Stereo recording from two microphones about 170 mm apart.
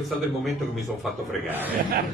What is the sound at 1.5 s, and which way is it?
Speech, 10° right (ahead or behind).